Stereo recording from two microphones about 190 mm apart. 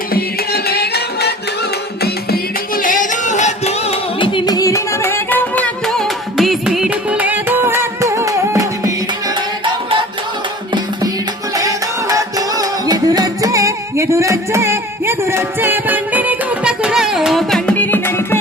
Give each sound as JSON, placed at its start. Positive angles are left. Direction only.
{"t": 0.1, "sound": "music", "side_deg": 55}
{"t": 11.5, "sound": "music", "side_deg": -15}